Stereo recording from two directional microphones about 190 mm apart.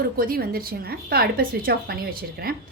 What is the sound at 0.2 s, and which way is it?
A woman's voice, 50° right (ahead or behind).